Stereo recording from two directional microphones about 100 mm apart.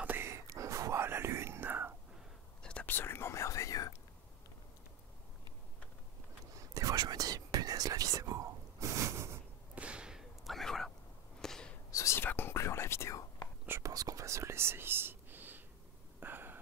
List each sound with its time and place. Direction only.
0.0 s whispering: 20° right (ahead or behind)
2.6 s whispering: 10° left (ahead or behind); by 3.9 s 35° left (ahead or behind)
6.7 s whispering: 35° right (ahead or behind)
9.8 s whip: 10° right (ahead or behind)
11.4 s a sound: 5° left (ahead or behind)
11.9 s whispering: 35° left (ahead or behind)
12.2 s whispering: 20° left (ahead or behind)
13.7 s whispering: 30° right (ahead or behind)
16.2 s a sound: 20° right (ahead or behind)